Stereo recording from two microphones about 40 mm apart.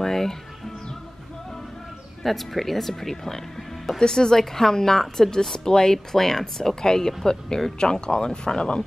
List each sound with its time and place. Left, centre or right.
0.0 s music: centre
2.2 s speech: centre
6.1 s speech: centre